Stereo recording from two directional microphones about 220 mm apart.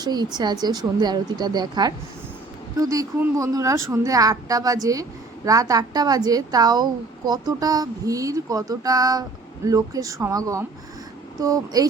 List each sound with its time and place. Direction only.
0.0 s a woman's voice: 20° right (ahead or behind)